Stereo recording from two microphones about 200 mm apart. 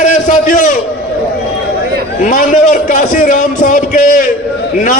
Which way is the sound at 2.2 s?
40° left (ahead or behind).